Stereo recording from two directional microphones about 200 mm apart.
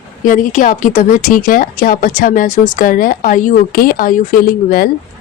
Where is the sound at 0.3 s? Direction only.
40° left (ahead or behind).